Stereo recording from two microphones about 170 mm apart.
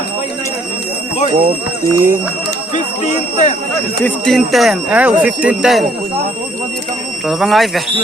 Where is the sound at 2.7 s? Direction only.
45° left (ahead or behind).